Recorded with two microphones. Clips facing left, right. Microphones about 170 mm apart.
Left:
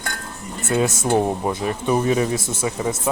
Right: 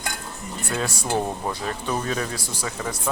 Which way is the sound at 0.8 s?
20° left (ahead or behind).